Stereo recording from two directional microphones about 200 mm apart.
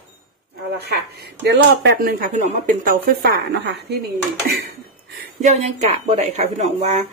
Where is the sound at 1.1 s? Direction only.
55° right (ahead or behind).